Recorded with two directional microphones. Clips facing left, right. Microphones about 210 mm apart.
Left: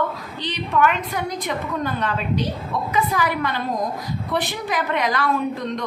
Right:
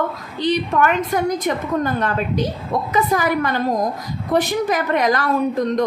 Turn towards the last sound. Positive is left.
turn(degrees=-45)  # may be behind; listen again after turning